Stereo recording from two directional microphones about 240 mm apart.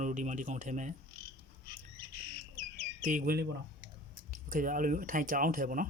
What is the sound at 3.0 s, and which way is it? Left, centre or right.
Speech, right.